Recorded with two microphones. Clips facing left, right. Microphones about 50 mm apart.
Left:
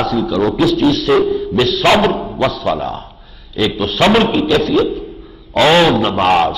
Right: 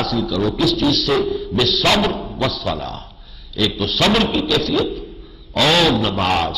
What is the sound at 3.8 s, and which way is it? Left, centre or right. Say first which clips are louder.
A man's voice: left 5 dB; left.